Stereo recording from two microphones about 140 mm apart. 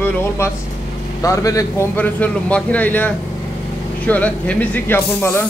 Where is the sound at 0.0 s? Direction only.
15° left (ahead or behind).